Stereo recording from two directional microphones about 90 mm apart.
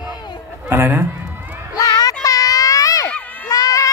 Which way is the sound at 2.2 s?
40° left (ahead or behind).